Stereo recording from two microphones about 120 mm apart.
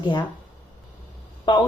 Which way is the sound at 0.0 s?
40° left (ahead or behind).